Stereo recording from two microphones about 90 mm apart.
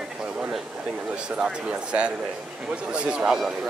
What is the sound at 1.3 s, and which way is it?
Speech, 10° right (ahead or behind).